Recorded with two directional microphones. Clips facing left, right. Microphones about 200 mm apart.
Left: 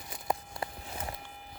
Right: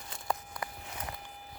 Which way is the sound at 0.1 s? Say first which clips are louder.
Left 2 dB; 25° left (ahead or behind).